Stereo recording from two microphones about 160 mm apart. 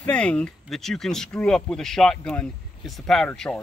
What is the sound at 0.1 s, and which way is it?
Speech, 5° left (ahead or behind).